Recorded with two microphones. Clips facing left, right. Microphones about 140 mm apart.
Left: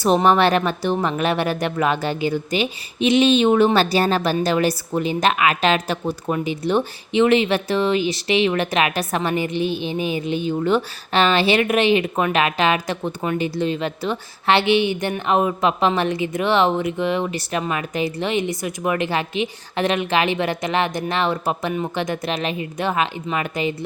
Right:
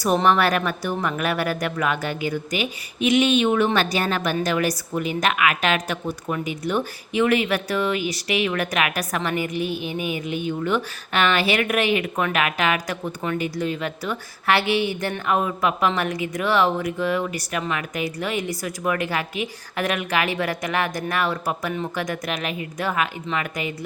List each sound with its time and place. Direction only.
0.0 s speech: 25° left (ahead or behind)